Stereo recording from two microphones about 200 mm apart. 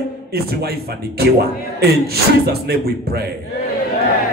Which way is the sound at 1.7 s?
50° right (ahead or behind).